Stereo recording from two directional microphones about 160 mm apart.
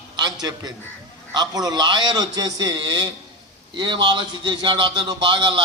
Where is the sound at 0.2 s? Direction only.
25° right (ahead or behind).